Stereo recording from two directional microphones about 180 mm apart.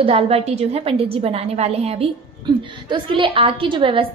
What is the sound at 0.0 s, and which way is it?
A woman's voice, 30° right (ahead or behind).